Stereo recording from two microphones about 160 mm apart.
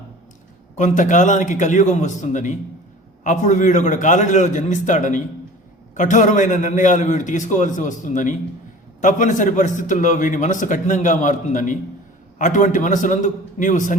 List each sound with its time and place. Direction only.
0.8 s a man's voice: 50° left (ahead or behind)